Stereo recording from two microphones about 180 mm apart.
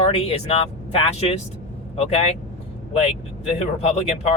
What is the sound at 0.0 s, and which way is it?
Mantra, 35° left (ahead or behind).